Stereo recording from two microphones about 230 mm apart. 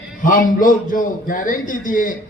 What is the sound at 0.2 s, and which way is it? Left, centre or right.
A man's voice, left.